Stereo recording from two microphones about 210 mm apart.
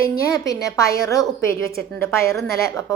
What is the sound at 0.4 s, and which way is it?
A woman's voice, 15° left (ahead or behind).